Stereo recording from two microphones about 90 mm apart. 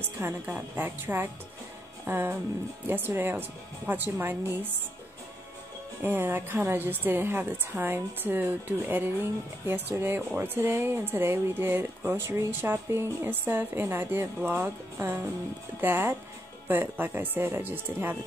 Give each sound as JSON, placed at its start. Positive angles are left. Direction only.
{"t": 0.0, "sound": "speech", "side_deg": -25}
{"t": 6.0, "sound": "speech", "side_deg": -25}